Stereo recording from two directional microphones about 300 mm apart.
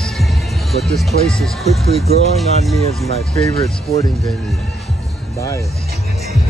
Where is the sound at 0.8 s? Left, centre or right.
Centre.